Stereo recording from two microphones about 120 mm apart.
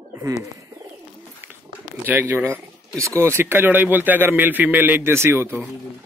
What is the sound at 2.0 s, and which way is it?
Speech, 15° right (ahead or behind).